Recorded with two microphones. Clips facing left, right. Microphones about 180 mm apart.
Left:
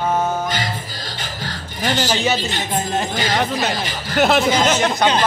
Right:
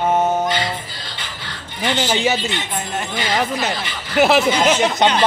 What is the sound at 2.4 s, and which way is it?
Speech, 40° left (ahead or behind).